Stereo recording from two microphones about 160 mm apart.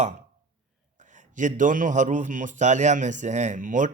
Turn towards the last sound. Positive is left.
turn(degrees=-55)  # may be behind; listen again after turning